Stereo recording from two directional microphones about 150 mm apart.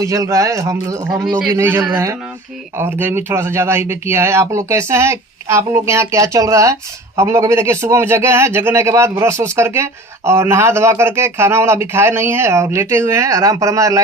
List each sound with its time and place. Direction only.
0.0 s speech: 20° right (ahead or behind)